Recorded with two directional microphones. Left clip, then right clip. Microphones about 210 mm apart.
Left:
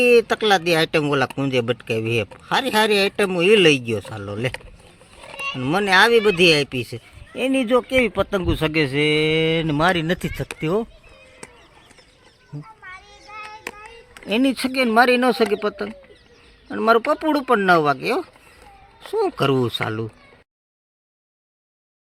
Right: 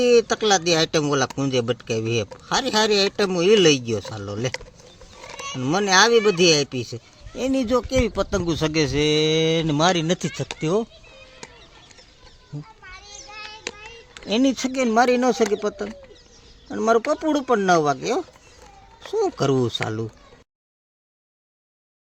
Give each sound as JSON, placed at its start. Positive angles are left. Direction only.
{"t": 0.0, "sound": "speech", "side_deg": 0}
{"t": 5.5, "sound": "speech", "side_deg": 0}
{"t": 11.4, "sound": "a sound", "side_deg": 35}
{"t": 12.8, "sound": "children playing", "side_deg": 15}
{"t": 13.7, "sound": "hands", "side_deg": 25}
{"t": 14.3, "sound": "speech", "side_deg": 0}